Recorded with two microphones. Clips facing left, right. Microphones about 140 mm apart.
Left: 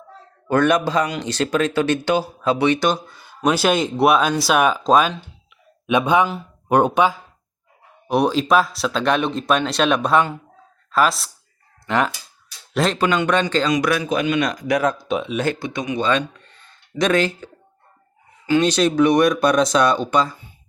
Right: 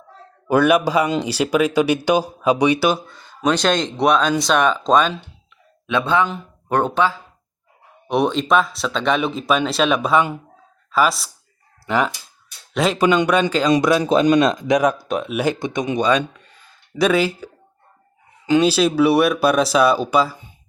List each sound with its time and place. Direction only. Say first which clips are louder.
0.4 s speech: right 2 dB; 10° right (ahead or behind)
3.1 s speech: even; 5° left (ahead or behind)
5.8 s a man's voice: left 2 dB; 15° left (ahead or behind)
8.0 s speech: left 1 dB; centre (ahead or behind)
13.7 s speech: right 4 dB; 25° right (ahead or behind)
15.0 s speech: even; centre (ahead or behind)
15.4 s speech: right 2 dB; 20° right (ahead or behind)
18.6 s speech: even; 5° right (ahead or behind)